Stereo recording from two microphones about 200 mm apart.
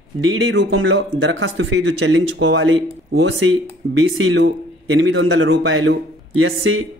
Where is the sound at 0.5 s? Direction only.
65° right (ahead or behind).